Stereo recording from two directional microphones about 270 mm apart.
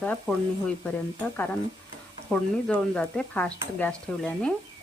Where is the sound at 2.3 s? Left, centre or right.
Centre.